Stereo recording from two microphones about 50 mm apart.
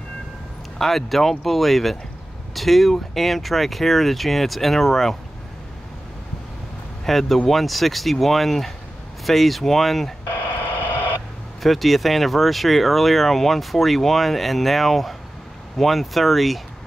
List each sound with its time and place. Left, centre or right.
0.7 s speech: centre
7.1 s speech: centre
10.2 s radio: left
11.6 s speech: centre